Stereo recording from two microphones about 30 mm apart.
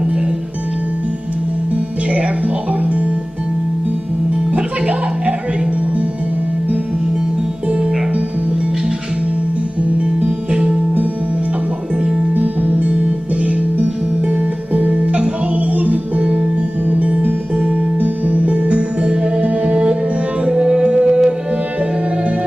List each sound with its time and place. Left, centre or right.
2.4 s music: right
4.5 s music: right
10.5 s music: right
13.4 s music: right
14.7 s music: right
15.6 s music: right
17.6 s music: right
19.4 s music: right
20.4 s music: right